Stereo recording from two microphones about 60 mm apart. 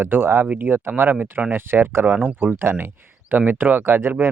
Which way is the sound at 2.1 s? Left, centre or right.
Right.